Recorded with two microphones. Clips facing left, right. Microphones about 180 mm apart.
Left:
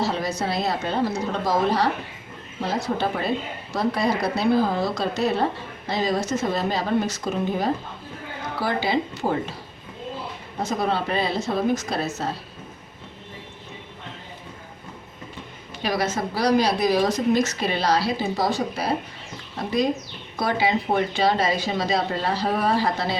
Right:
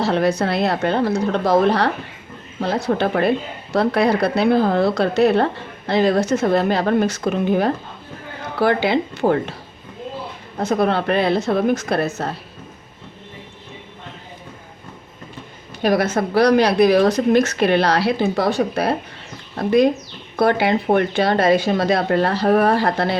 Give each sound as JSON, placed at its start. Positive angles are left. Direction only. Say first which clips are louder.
{"t": 0.0, "sound": "a woman's voice", "louder": "right 7 dB", "side_deg": -60}
{"t": 10.6, "sound": "a woman's voice", "louder": "right 6 dB", "side_deg": -60}
{"t": 15.8, "sound": "a woman's voice", "louder": "right 7 dB", "side_deg": -55}